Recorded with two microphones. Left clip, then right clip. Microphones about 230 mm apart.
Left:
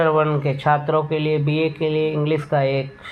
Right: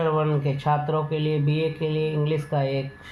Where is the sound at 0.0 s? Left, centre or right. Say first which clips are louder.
Left 6 dB; left.